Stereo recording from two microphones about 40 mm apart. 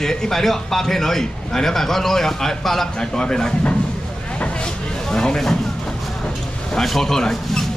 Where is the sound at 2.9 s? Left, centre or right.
Centre.